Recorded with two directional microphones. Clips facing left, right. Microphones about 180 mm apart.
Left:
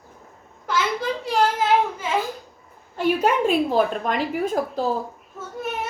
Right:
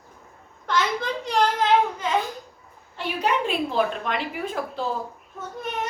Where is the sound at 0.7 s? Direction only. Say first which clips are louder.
Left 1 dB; 5° left (ahead or behind).